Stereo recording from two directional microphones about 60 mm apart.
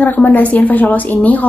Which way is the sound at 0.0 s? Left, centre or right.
Left.